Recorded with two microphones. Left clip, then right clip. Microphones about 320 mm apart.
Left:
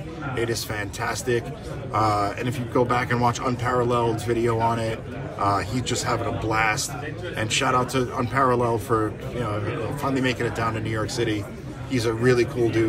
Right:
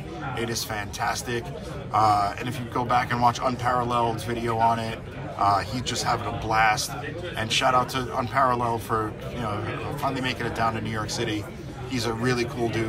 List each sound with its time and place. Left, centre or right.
0.4 s a man's voice: centre